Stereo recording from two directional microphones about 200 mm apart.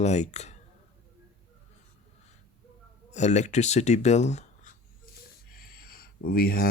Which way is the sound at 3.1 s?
35° left (ahead or behind).